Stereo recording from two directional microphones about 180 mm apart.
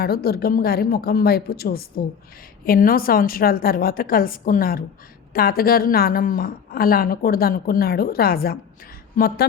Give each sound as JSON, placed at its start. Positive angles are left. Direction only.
{"t": 0.0, "sound": "a woman's voice", "side_deg": 60}